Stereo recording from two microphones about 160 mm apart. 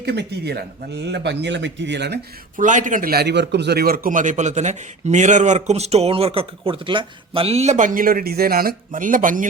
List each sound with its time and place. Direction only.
0.0 s speech: 90° right
2.6 s a man's voice: 50° right (ahead or behind)